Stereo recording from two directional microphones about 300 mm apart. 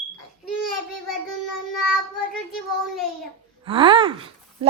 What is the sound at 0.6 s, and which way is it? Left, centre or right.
Child singing, left.